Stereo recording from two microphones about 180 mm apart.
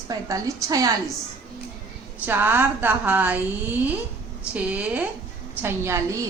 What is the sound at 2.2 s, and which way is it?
A woman's voice, 10° right (ahead or behind).